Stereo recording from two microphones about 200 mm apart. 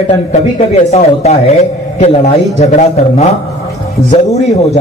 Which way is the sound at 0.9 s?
35° left (ahead or behind).